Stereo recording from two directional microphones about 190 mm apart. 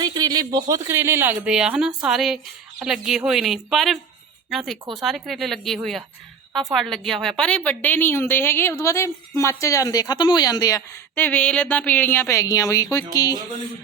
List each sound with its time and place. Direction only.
0.0 s a woman's voice: 20° right (ahead or behind); by 13.1 s 15° left (ahead or behind)